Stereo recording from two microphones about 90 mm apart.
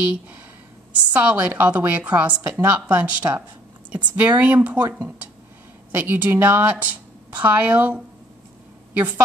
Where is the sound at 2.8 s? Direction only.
15° right (ahead or behind).